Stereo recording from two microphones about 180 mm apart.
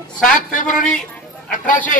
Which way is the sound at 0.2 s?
45° left (ahead or behind).